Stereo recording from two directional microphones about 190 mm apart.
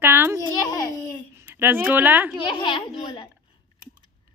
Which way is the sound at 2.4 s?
25° left (ahead or behind).